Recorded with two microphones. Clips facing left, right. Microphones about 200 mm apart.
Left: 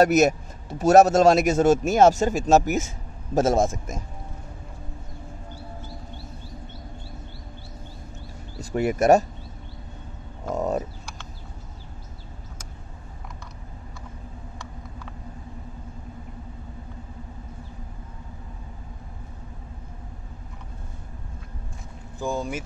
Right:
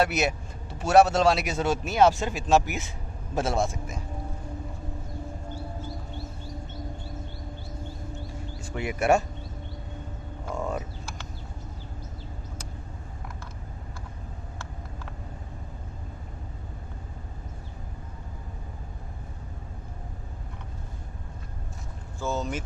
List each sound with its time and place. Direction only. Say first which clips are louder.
0.0 s speech: left 8 dB; 45° left (ahead or behind)
8.5 s speech: left 8 dB; 40° left (ahead or behind)
10.5 s frog: left 6 dB; 40° left (ahead or behind)
22.2 s speech: left 2 dB; 10° left (ahead or behind)